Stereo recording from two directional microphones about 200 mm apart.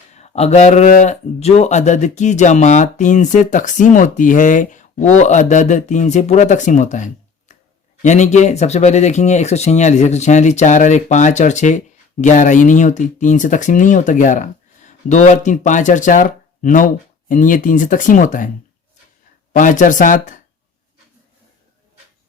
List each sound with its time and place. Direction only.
0.1 s speech: 30° left (ahead or behind)
19.5 s speech: 40° left (ahead or behind)